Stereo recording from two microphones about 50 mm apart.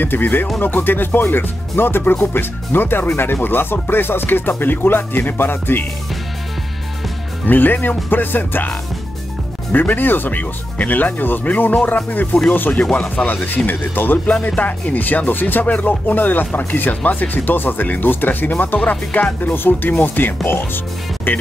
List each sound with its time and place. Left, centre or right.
0.0 s speech: left
7.4 s speech: left
9.7 s speech: left